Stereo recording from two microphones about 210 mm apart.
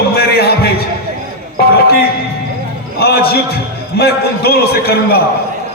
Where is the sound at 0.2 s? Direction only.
50° left (ahead or behind).